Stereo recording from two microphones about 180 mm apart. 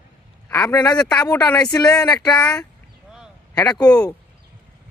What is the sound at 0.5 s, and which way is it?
Speech, 15° left (ahead or behind).